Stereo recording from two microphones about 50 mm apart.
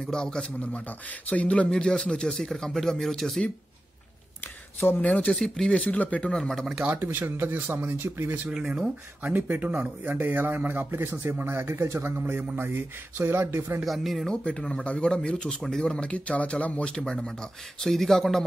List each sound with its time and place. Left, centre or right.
0.0 s a man's voice: centre
1.8 s speech: centre
5.0 s a man's voice: left
5.3 s speech: centre
5.7 s a man's voice: centre
7.0 s a man's voice: right
7.5 s speech: right
8.5 s speech: centre
9.3 s a man's voice: right
12.3 s a man's voice: right
13.8 s speech: centre
14.2 s a man's voice: centre
16.9 s speech: centre